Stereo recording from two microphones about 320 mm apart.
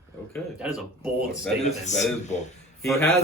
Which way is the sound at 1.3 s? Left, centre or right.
Left.